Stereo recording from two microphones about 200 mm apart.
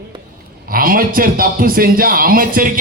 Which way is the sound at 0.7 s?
45° right (ahead or behind).